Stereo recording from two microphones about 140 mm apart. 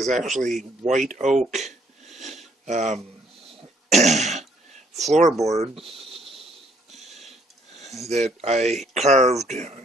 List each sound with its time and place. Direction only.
0.0 s speech: 60° right (ahead or behind)
2.1 s a sound: 55° right (ahead or behind)
3.9 s speech: 55° right (ahead or behind)
8.1 s speech: 50° right (ahead or behind)